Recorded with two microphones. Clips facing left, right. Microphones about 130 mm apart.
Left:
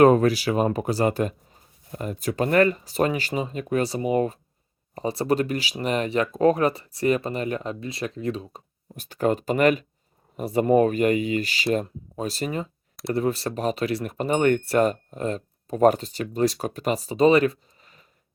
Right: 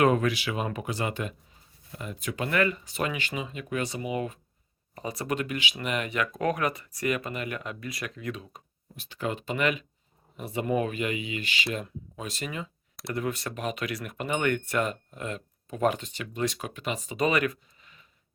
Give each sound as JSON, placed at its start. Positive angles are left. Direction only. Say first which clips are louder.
{"t": 0.0, "sound": "speech", "louder": "left 7 dB", "side_deg": 40}
{"t": 9.0, "sound": "speech", "louder": "left 9 dB", "side_deg": 45}